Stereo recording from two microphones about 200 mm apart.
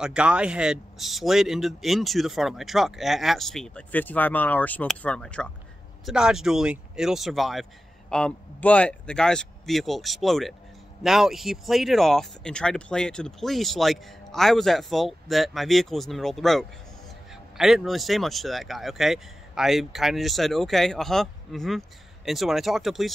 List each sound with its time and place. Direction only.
0.0 s speech: 5° right (ahead or behind)